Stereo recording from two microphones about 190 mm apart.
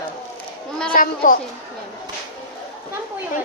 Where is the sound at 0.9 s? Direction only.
45° left (ahead or behind).